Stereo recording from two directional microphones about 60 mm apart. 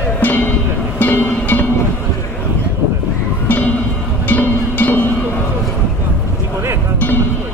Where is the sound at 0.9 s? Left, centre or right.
Left.